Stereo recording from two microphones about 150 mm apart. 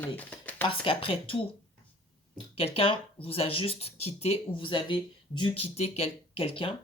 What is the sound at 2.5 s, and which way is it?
Speech, 40° left (ahead or behind).